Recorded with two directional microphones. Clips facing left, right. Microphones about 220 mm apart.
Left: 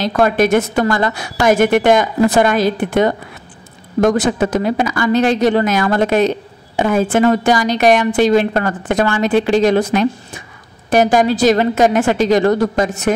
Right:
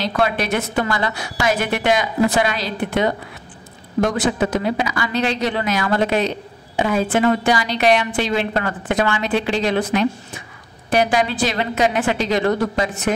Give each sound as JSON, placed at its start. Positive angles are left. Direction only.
{"t": 0.0, "sound": "a woman's voice", "side_deg": 45}